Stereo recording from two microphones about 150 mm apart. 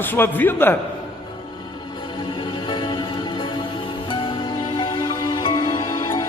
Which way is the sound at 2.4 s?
35° left (ahead or behind).